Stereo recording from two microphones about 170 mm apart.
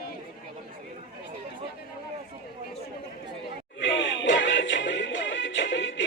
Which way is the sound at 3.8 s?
90° left.